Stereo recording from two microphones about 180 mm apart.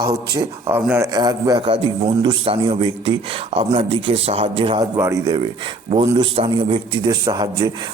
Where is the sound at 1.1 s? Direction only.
20° right (ahead or behind).